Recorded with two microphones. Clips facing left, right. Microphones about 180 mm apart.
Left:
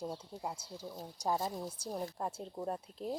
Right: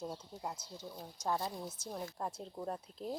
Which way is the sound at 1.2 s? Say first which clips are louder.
Left 2 dB; 35° left (ahead or behind).